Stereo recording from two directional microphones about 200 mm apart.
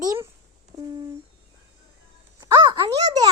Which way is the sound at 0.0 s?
15° right (ahead or behind).